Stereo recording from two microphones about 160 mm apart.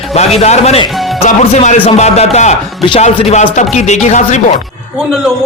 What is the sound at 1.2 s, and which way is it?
Speech, 50° left (ahead or behind).